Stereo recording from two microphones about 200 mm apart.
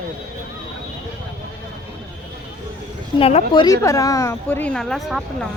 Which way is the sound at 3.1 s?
30° left (ahead or behind).